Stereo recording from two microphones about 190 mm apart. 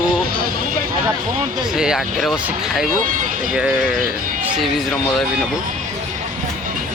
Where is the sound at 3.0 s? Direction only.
45° right (ahead or behind).